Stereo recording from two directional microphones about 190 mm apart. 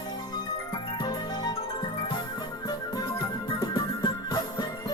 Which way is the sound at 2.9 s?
20° left (ahead or behind).